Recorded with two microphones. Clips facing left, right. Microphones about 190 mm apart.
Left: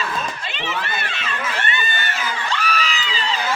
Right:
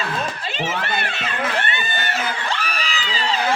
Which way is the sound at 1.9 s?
40° right (ahead or behind).